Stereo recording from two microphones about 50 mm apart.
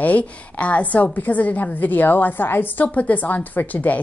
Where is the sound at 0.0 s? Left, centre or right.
Left.